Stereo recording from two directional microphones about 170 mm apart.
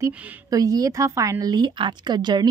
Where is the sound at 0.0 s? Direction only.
20° right (ahead or behind).